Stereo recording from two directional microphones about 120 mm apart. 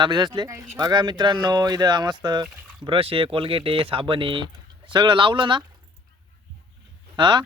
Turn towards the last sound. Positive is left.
turn(degrees=-40)  # may be behind; listen again after turning